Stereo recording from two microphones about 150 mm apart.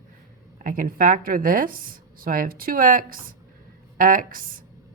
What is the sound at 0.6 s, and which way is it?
Speech, 70° right (ahead or behind).